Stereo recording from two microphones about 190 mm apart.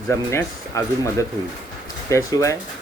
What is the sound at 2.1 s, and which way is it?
Speech, 15° left (ahead or behind).